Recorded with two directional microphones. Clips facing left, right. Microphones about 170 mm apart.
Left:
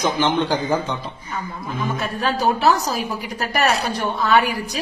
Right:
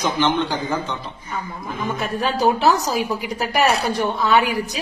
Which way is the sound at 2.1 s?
20° right (ahead or behind).